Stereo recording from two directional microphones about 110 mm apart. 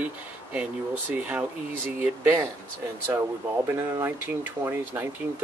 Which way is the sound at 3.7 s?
20° right (ahead or behind).